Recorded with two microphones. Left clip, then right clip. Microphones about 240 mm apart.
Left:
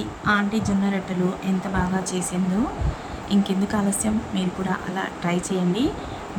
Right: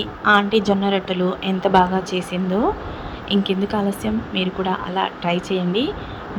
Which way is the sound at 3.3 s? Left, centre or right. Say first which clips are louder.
Right 4 dB; centre.